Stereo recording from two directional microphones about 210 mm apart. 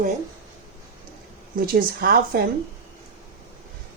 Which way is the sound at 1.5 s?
45° right (ahead or behind).